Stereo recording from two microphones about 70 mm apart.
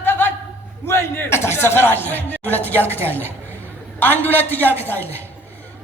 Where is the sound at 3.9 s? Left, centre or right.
Left.